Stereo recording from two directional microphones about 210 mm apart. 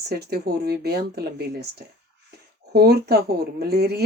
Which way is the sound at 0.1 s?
50° right (ahead or behind).